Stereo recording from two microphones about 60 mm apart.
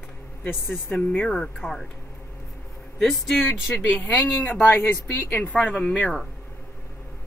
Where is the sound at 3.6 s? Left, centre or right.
Left.